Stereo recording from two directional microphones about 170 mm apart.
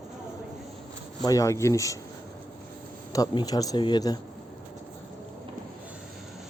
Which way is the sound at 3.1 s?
25° left (ahead or behind).